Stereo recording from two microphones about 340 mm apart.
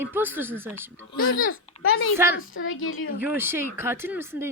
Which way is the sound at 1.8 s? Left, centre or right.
Left.